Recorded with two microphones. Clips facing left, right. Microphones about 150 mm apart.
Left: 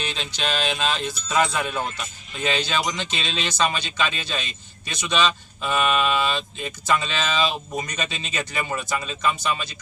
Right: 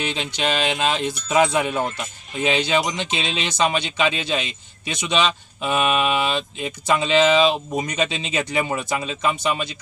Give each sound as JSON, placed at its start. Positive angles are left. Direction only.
{"t": 0.0, "sound": "speech", "side_deg": -20}